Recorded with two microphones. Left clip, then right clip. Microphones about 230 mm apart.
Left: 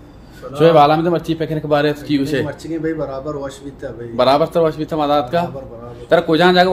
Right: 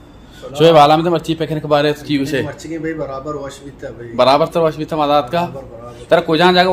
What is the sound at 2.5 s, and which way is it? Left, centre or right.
Speech, centre.